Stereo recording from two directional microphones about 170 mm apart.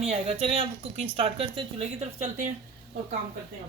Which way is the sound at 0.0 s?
35° right (ahead or behind).